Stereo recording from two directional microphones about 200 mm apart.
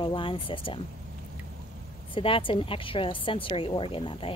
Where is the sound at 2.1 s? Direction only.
25° left (ahead or behind).